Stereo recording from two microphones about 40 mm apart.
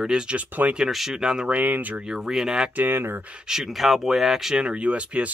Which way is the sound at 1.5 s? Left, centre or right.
Right.